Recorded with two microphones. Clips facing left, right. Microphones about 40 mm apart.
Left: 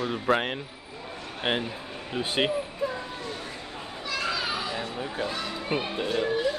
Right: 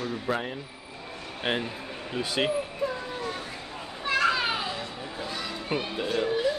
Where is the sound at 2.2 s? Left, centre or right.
Left.